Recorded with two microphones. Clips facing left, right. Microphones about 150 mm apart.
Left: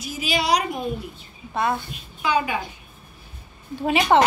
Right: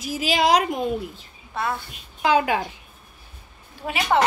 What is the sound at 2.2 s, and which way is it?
Speech, 90° right.